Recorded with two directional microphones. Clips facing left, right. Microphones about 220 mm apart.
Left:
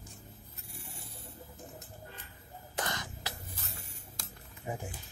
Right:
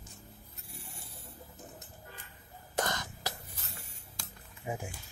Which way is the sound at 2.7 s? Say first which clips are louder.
Right 4 dB; 45° right (ahead or behind).